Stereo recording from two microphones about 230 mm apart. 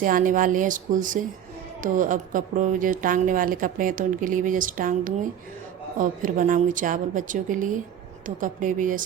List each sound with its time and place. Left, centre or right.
0.0 s a woman's voice: right